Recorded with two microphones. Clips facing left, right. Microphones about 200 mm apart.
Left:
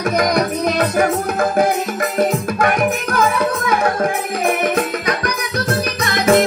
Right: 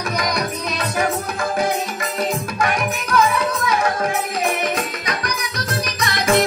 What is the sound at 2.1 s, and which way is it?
Music, 55° left (ahead or behind).